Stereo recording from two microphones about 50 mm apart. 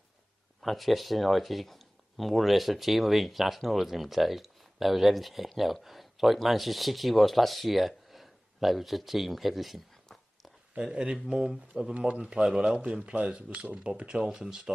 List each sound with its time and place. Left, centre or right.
0.6 s speech: centre
10.8 s speech: centre
11.9 s speech: right